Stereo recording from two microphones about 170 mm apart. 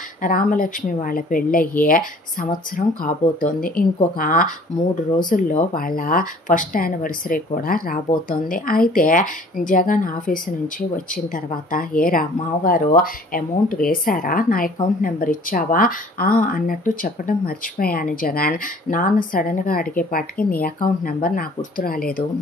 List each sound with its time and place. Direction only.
0.2 s speech: 50° left (ahead or behind)
12.0 s speech: 55° left (ahead or behind)